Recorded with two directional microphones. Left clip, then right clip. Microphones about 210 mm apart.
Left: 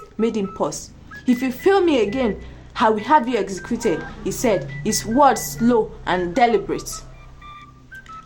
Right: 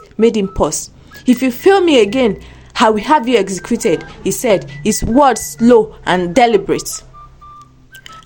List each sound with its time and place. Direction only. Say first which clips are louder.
0.2 s speech: right 9 dB; 35° right (ahead or behind)